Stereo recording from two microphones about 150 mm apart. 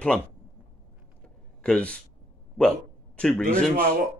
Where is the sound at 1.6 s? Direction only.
5° left (ahead or behind).